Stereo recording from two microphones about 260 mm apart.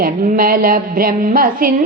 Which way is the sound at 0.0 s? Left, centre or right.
Right.